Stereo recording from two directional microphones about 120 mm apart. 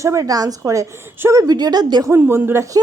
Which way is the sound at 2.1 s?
20° right (ahead or behind).